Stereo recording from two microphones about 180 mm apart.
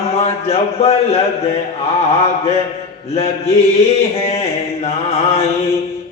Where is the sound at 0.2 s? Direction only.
35° left (ahead or behind).